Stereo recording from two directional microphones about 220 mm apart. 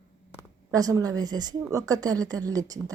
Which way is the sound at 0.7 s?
15° right (ahead or behind).